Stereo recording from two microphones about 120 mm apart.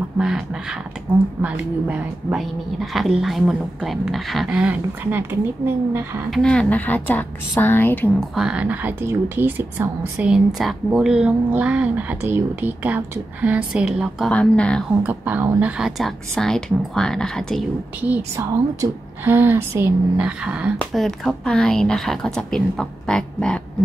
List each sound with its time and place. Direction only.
0.2 s a woman's voice: 5° right (ahead or behind)
6.3 s a woman's voice: 10° left (ahead or behind)
8.2 s speech: 5° right (ahead or behind)
14.3 s a woman's voice: 10° left (ahead or behind)
15.0 s speech: 15° right (ahead or behind)
15.8 s a woman's voice: centre (ahead or behind)
18.0 s speech: 15° right (ahead or behind)
20.9 s a woman's voice: centre (ahead or behind)